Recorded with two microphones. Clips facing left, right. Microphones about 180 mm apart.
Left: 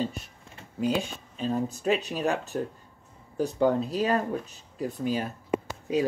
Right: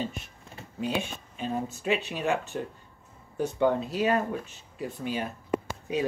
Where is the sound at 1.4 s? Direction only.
40° left (ahead or behind).